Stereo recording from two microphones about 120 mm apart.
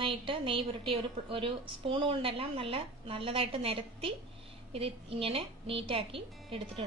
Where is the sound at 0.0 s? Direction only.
45° right (ahead or behind).